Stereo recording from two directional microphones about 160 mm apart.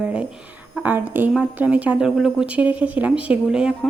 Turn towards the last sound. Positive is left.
turn(degrees=-5)  # may be behind; listen again after turning